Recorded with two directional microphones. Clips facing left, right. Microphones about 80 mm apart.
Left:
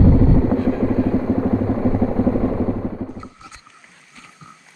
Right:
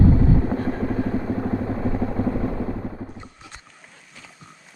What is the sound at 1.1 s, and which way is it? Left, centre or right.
Vehicle, left.